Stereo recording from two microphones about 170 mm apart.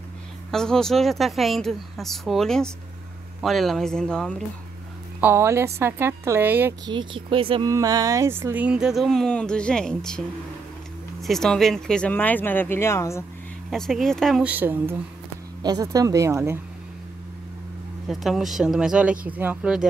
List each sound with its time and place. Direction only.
0.5 s speech: 5° left (ahead or behind)
5.2 s a woman's voice: 15° right (ahead or behind)
6.9 s speech: 30° right (ahead or behind)
7.7 s speech: 20° right (ahead or behind); by 13.2 s 15° left (ahead or behind)
13.7 s speech: centre (ahead or behind)
15.6 s speech: 20° right (ahead or behind)
18.0 s speech: centre (ahead or behind)